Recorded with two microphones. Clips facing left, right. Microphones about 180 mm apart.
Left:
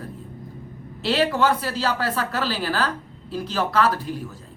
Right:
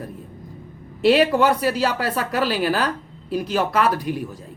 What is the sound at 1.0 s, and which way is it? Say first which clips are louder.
A woman's voice: right 5 dB; 15° right (ahead or behind).